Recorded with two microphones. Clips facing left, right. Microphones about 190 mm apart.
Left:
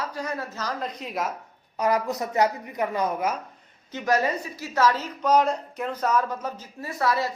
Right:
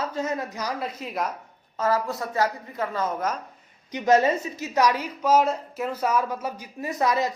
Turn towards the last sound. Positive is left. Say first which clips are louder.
# right 2 dB
turn(degrees=-20)  # may be behind; listen again after turning